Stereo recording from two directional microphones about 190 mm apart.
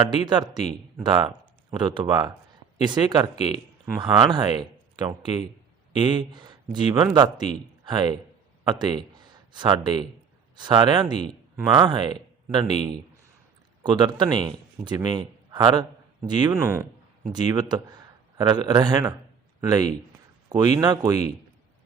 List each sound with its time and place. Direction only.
0.1 s a man's voice: 20° right (ahead or behind)